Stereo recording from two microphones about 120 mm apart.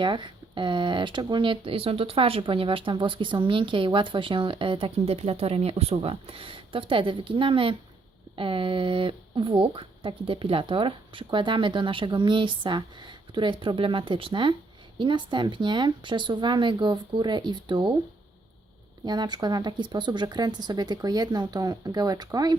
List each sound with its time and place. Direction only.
0.0 s speech: 40° right (ahead or behind)
19.0 s speech: 35° right (ahead or behind)